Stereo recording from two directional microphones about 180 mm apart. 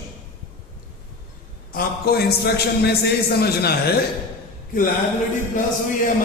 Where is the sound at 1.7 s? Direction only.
55° left (ahead or behind).